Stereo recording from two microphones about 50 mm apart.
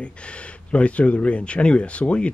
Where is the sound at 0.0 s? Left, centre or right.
Left.